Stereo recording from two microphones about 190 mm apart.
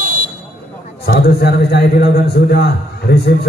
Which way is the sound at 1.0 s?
60° left (ahead or behind).